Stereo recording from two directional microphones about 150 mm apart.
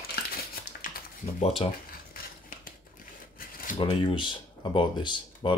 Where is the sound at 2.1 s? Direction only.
75° left (ahead or behind).